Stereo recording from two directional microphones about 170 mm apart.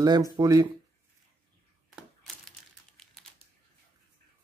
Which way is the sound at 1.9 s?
Centre (ahead or behind).